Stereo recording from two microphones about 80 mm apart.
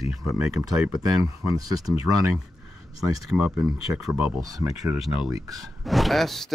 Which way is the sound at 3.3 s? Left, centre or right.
Centre.